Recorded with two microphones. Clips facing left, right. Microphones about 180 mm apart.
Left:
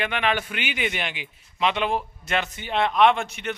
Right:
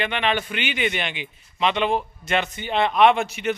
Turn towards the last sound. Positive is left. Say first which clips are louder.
# right 3 dB
turn(degrees=-5)  # may be behind; listen again after turning